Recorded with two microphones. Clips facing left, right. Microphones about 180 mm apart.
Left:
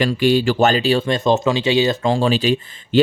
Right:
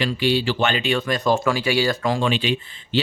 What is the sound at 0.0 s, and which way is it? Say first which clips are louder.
Speech: left 5 dB; 45° left (ahead or behind).